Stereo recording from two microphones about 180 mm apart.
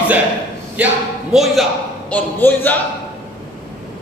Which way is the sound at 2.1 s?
10° left (ahead or behind).